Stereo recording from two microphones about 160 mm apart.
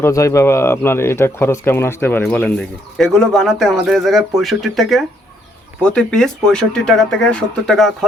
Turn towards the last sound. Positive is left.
turn(degrees=5)  # may be behind; listen again after turning